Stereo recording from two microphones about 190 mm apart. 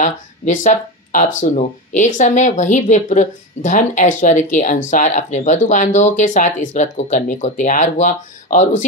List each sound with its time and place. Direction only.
0.0 s speech: 40° left (ahead or behind)